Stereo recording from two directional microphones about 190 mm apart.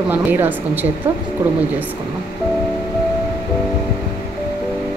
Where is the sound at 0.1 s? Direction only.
10° right (ahead or behind).